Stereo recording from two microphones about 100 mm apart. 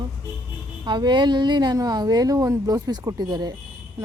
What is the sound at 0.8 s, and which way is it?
A woman's voice, 50° right (ahead or behind).